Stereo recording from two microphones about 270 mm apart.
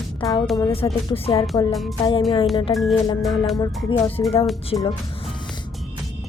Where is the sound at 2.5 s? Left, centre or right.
Centre.